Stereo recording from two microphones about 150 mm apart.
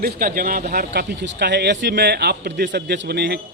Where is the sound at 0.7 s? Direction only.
90° right.